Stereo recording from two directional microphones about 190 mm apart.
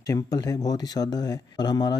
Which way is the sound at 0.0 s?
20° left (ahead or behind).